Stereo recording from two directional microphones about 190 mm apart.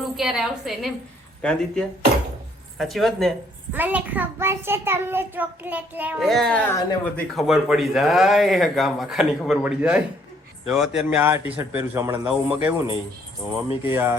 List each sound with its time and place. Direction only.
0.0 s a woman's voice: centre (ahead or behind)
13.8 s a child's voice: 10° right (ahead or behind)